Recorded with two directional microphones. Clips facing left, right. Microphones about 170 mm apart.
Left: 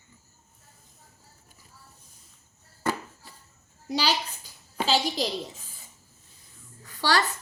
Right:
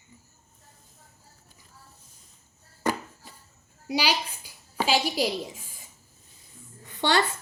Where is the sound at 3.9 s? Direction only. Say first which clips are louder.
Even; 10° right (ahead or behind).